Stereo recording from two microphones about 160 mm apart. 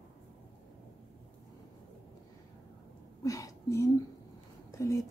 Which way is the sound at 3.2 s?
20° left (ahead or behind).